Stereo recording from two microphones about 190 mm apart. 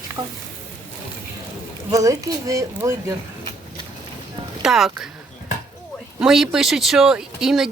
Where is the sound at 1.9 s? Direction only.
20° right (ahead or behind).